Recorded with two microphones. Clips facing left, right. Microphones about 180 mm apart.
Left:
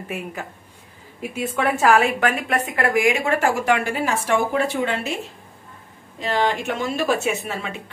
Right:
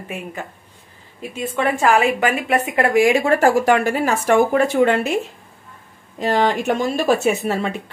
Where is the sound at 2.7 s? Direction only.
30° right (ahead or behind); by 5.1 s 55° right (ahead or behind).